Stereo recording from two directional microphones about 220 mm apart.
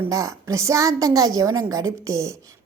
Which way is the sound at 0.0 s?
15° right (ahead or behind).